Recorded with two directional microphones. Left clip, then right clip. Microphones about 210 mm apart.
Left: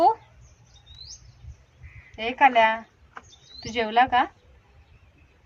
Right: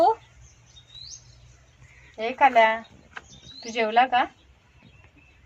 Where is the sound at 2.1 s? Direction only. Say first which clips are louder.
Left 1 dB; 20° left (ahead or behind).